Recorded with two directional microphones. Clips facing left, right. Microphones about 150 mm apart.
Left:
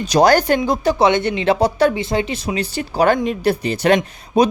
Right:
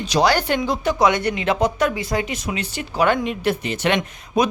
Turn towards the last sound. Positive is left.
turn(degrees=30)  # may be behind; listen again after turning